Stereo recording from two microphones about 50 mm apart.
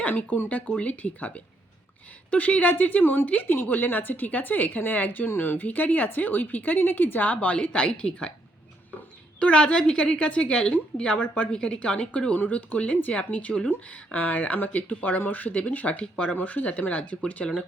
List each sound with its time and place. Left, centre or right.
0.0 s a woman's voice: left
3.2 s speech: left
3.5 s a woman's voice: left
9.4 s a woman's voice: left
12.4 s a woman's voice: left
16.4 s a woman's voice: left